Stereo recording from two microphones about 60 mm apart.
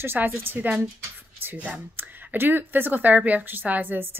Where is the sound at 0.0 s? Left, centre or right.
Right.